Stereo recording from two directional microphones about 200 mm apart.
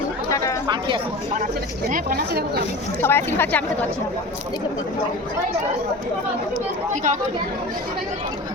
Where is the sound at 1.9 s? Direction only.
50° right (ahead or behind).